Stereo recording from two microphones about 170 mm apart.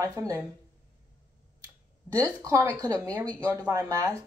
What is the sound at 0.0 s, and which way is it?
Speech, 20° right (ahead or behind).